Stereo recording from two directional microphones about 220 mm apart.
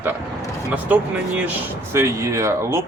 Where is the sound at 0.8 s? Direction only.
5° right (ahead or behind).